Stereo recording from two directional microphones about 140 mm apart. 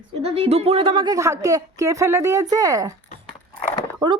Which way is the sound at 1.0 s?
25° right (ahead or behind).